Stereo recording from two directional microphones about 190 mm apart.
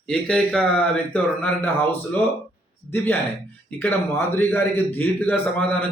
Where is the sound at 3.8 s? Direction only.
10° left (ahead or behind).